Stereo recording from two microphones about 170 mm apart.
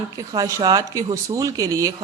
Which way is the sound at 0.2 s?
20° right (ahead or behind).